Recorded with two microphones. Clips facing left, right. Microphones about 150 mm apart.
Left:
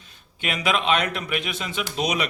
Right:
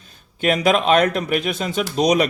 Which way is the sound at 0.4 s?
40° right (ahead or behind).